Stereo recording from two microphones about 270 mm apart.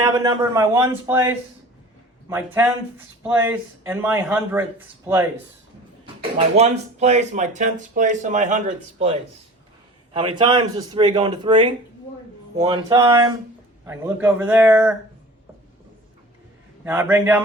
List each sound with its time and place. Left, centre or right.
0.0 s a man's voice: centre
6.3 s a man's voice: right; by 14.9 s centre
16.8 s a man's voice: centre